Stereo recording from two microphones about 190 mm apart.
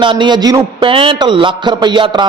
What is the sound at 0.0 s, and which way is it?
A man's voice, 25° right (ahead or behind).